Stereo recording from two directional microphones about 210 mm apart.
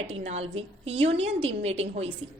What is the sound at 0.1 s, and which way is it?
A woman's voice, 30° right (ahead or behind).